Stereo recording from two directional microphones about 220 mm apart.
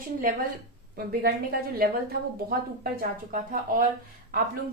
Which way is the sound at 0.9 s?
45° right (ahead or behind).